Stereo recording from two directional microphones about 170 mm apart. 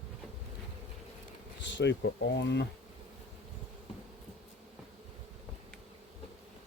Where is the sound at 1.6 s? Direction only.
90° left.